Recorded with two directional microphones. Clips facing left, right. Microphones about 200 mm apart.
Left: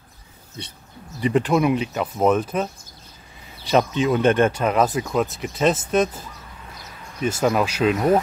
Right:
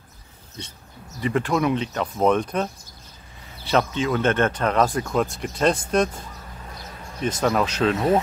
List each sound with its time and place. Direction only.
1.2 s speech: 15° left (ahead or behind)
3.6 s speech: 15° left (ahead or behind)
7.2 s speech: 10° left (ahead or behind)